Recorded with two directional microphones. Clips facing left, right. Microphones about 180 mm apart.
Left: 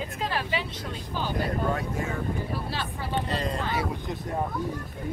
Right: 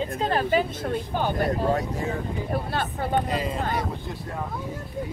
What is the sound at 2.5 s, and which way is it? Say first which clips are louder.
Speech: right 5 dB; 55° right (ahead or behind).